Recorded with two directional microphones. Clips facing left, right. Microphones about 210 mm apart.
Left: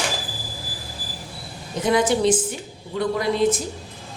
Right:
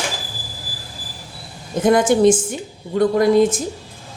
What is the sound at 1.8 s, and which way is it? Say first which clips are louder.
Speech: right 6 dB; 50° right (ahead or behind).